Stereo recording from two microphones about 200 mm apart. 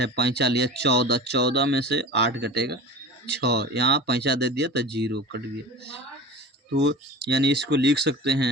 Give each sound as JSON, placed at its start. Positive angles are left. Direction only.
{"t": 0.0, "sound": "speech", "side_deg": -55}
{"t": 6.8, "sound": "speech", "side_deg": -55}